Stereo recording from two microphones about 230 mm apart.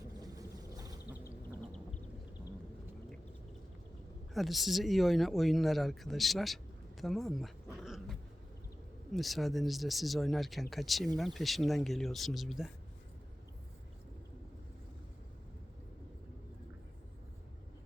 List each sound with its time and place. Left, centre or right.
0.2 s vehicle: centre
4.4 s speech: centre